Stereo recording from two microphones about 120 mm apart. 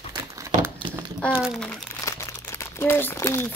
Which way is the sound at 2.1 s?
25° left (ahead or behind).